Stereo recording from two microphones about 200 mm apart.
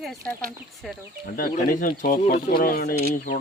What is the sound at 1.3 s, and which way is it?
Speech, 45° left (ahead or behind).